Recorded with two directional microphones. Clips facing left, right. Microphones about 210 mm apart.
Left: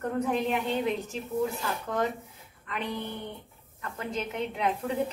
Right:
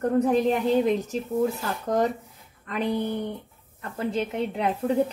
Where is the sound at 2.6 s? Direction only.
40° right (ahead or behind).